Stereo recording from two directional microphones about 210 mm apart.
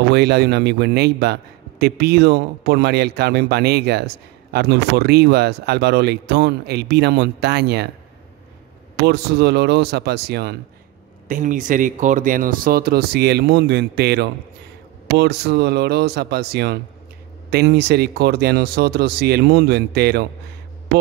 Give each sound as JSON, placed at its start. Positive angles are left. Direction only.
{"t": 0.1, "sound": "a man's voice", "side_deg": -50}
{"t": 9.0, "sound": "a man's voice", "side_deg": -55}
{"t": 11.2, "sound": "a man's voice", "side_deg": -40}